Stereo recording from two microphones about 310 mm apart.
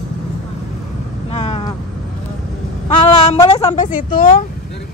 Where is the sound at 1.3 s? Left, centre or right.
Centre.